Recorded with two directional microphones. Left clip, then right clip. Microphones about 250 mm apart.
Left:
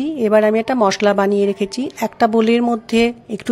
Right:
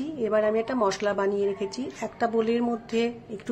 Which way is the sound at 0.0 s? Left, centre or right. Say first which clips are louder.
Left 10 dB; left.